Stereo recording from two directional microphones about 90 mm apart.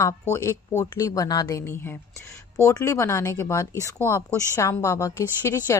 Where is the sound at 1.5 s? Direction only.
30° left (ahead or behind).